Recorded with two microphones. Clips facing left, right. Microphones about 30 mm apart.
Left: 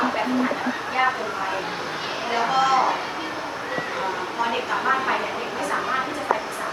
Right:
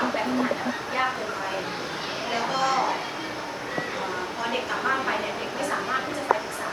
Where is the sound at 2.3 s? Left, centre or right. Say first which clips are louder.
Left 5 dB; centre.